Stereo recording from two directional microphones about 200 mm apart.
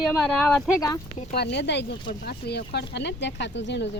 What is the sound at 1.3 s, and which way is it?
Speech, 55° left (ahead or behind).